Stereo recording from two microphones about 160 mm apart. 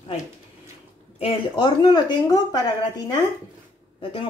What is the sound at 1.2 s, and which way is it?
A woman's voice, 35° left (ahead or behind).